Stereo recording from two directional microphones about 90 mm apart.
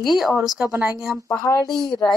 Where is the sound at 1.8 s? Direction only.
45° left (ahead or behind).